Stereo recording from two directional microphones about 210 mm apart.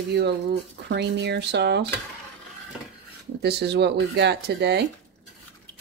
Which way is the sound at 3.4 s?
50° right (ahead or behind).